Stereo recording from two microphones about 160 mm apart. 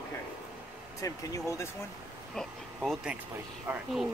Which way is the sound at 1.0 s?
20° left (ahead or behind).